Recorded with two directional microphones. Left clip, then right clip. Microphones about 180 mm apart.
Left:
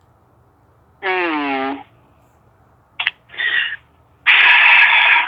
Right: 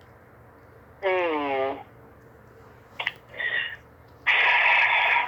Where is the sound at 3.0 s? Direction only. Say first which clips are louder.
Left 9 dB; 35° left (ahead or behind).